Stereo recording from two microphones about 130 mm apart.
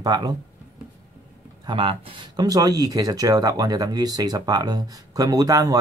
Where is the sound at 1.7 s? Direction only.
45° right (ahead or behind).